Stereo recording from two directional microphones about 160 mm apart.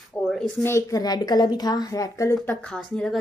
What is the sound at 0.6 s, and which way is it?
A woman's voice, 20° left (ahead or behind).